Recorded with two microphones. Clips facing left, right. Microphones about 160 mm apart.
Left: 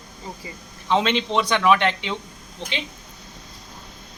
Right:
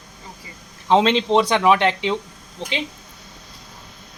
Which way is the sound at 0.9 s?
35° right (ahead or behind).